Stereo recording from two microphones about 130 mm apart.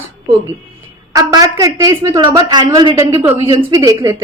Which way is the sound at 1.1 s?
30° right (ahead or behind).